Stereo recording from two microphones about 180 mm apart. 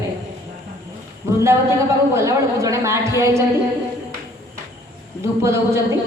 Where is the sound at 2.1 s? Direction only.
15° right (ahead or behind).